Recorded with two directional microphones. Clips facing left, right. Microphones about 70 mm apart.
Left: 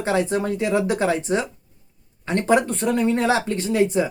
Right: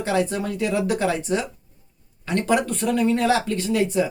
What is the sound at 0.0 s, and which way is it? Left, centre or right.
Speech, left.